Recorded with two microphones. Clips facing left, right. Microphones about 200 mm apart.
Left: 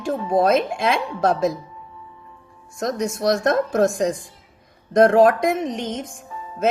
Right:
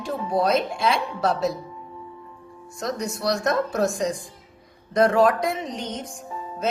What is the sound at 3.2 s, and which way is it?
A woman's voice, 45° left (ahead or behind).